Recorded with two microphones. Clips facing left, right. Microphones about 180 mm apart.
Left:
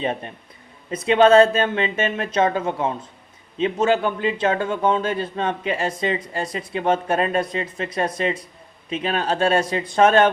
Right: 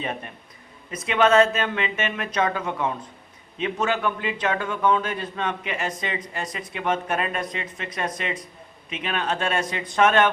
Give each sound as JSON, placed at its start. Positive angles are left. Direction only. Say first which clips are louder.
{"t": 0.9, "sound": "a man's voice", "louder": "left 6 dB", "side_deg": 30}